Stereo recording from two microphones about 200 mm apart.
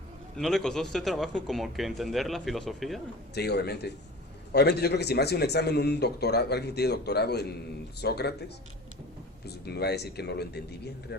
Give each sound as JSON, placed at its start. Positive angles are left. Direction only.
{"t": 0.3, "sound": "speech", "side_deg": 0}
{"t": 3.3, "sound": "speech", "side_deg": 55}
{"t": 9.5, "sound": "speech", "side_deg": 55}